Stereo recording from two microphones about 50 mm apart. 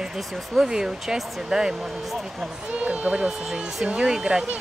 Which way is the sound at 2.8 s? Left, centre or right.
Right.